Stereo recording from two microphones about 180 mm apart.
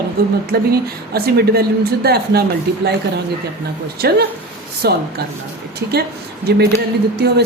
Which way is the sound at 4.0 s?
60° right (ahead or behind).